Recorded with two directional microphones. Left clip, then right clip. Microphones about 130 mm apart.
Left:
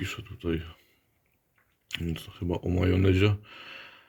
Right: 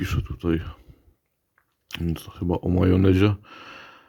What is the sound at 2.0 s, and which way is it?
Speech, 45° right (ahead or behind).